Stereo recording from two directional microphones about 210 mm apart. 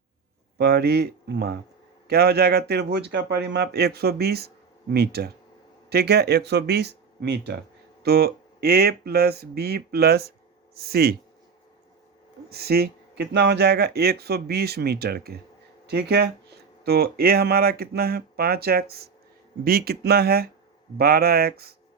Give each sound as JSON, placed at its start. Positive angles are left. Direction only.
{"t": 0.6, "sound": "speech", "side_deg": -50}
{"t": 12.5, "sound": "speech", "side_deg": -50}